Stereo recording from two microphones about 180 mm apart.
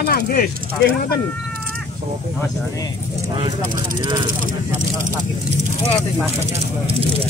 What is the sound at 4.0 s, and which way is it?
Speech, 25° right (ahead or behind).